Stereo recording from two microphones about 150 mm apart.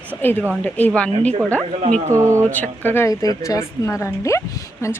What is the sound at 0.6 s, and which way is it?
Speech, 10° left (ahead or behind).